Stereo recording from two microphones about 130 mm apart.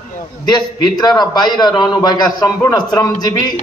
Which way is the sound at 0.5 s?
35° left (ahead or behind).